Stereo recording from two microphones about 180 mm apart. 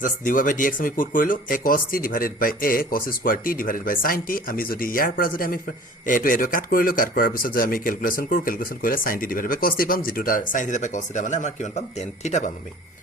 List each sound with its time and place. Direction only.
0.0 s speech: 45° left (ahead or behind)